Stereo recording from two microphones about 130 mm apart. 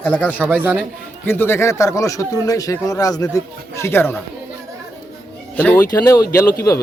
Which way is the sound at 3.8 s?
15° left (ahead or behind).